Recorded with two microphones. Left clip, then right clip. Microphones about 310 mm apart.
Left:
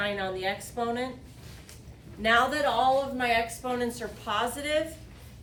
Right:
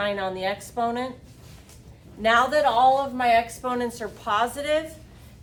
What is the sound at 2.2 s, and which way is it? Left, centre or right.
A woman's voice, centre.